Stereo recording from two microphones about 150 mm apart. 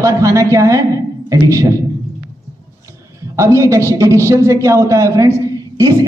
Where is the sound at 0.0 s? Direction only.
20° right (ahead or behind).